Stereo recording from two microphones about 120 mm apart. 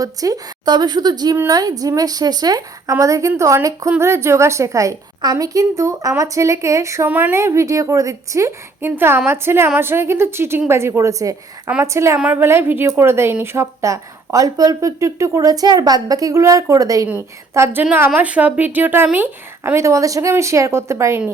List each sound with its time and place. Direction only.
0.0 s a woman's voice: 30° right (ahead or behind)